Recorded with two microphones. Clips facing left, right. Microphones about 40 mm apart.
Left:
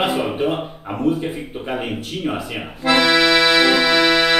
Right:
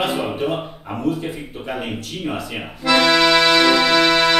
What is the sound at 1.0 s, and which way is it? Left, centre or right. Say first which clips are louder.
Speech: left 2 dB; left.